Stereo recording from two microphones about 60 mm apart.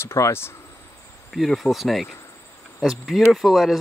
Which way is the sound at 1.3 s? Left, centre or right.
Centre.